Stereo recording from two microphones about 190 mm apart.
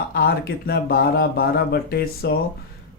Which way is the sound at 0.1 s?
55° left (ahead or behind).